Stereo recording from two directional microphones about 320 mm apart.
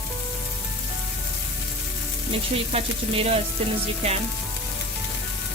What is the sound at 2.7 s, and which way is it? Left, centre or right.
Frying, centre.